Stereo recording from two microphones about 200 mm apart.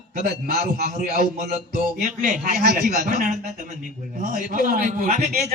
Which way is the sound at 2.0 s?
40° right (ahead or behind).